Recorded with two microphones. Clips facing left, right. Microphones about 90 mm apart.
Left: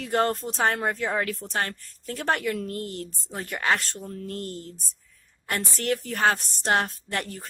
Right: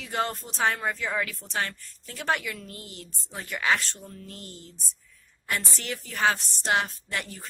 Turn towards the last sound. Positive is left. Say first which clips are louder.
# left 3 dB
turn(degrees=50)  # may be behind; listen again after turning